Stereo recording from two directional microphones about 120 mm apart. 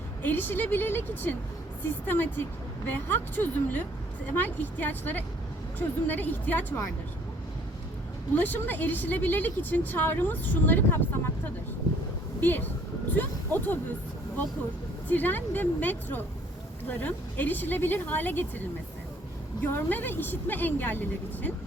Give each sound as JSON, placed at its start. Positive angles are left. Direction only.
{"t": 0.2, "sound": "speech", "side_deg": 15}
{"t": 8.4, "sound": "speech", "side_deg": 15}
{"t": 12.4, "sound": "speech", "side_deg": 15}
{"t": 15.1, "sound": "speech", "side_deg": 15}
{"t": 19.6, "sound": "speech", "side_deg": 15}